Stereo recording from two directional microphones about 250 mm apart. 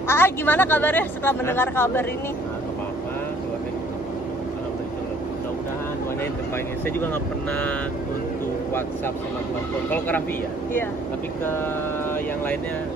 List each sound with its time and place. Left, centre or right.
0.1 s speech: centre
9.8 s speech: centre